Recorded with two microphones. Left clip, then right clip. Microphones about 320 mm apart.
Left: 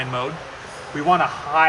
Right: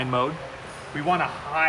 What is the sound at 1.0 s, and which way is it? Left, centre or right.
Speech, centre.